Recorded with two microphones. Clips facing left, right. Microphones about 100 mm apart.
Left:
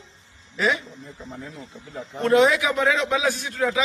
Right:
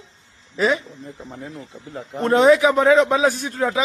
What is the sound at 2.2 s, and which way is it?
A man's voice, 35° right (ahead or behind).